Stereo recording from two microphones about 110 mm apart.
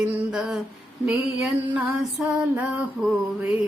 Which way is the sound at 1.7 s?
5° right (ahead or behind).